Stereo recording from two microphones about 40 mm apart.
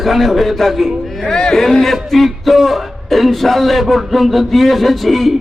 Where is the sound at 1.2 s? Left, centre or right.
Centre.